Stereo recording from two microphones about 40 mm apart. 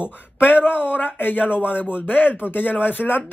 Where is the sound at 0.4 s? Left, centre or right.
Left.